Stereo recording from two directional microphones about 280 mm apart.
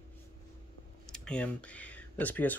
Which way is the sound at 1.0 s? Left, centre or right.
Centre.